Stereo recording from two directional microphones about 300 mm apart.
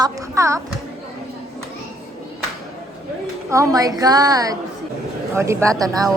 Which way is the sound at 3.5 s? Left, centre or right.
Centre.